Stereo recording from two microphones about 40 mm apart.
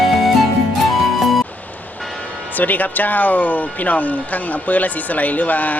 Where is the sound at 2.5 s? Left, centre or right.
Left.